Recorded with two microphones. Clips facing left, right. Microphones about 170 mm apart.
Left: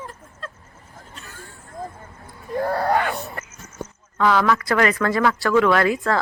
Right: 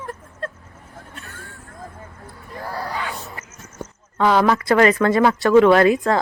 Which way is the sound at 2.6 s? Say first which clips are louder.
Left 7 dB; 60° left (ahead or behind).